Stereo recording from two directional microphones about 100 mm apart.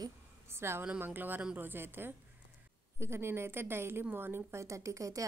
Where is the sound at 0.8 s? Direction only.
15° right (ahead or behind).